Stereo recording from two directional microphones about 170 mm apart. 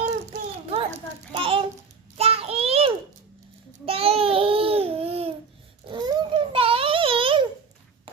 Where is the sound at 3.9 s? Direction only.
35° right (ahead or behind).